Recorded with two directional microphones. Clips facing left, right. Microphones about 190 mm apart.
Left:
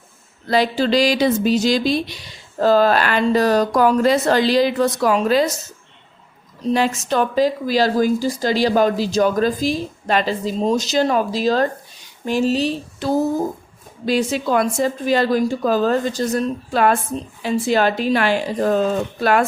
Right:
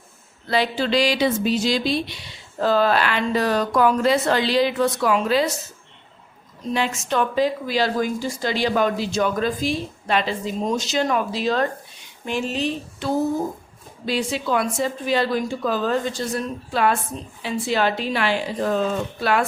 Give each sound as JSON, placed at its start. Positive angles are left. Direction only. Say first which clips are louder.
{"t": 0.4, "sound": "speech", "louder": "left 4 dB", "side_deg": 40}
{"t": 6.7, "sound": "a woman's voice", "louder": "left 3 dB", "side_deg": 40}